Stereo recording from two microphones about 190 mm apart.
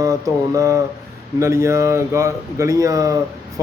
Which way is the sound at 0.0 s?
15° right (ahead or behind).